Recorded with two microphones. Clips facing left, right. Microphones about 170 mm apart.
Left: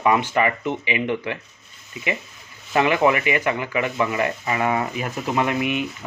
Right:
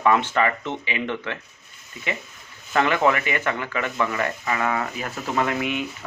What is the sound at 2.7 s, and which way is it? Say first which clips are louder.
Speech: left 2 dB; 15° left (ahead or behind).